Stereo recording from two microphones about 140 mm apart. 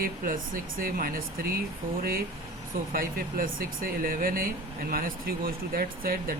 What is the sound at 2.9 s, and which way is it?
Speech, 90° right.